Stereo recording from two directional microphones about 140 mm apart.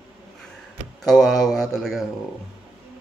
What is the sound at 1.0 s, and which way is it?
Speech, 5° left (ahead or behind).